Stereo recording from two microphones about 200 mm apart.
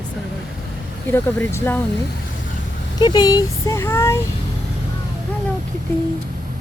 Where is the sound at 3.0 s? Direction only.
20° left (ahead or behind).